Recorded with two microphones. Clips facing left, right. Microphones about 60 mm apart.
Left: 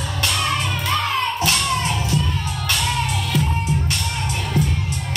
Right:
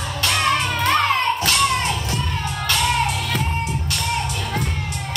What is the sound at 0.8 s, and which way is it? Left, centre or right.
Music, right.